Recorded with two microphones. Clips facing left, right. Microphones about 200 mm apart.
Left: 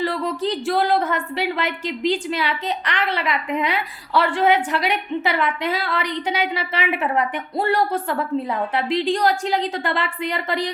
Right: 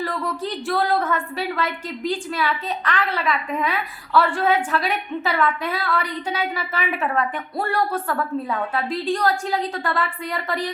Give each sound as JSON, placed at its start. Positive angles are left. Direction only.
{"t": 0.7, "sound": "a woman's voice", "side_deg": 20}
{"t": 9.0, "sound": "a woman's voice", "side_deg": 20}